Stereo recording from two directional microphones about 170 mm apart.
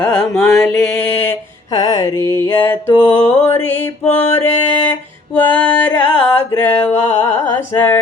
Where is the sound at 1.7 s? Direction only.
20° left (ahead or behind).